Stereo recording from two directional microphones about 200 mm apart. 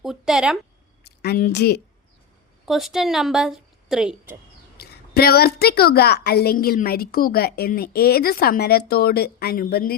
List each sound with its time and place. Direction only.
0.0 s speech: centre (ahead or behind)
1.0 s a woman's voice: 55° left (ahead or behind)
2.6 s a woman's voice: centre (ahead or behind)
4.8 s a woman's voice: 50° left (ahead or behind)